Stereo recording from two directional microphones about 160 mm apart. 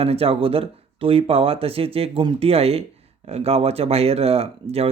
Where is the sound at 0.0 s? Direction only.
40° right (ahead or behind).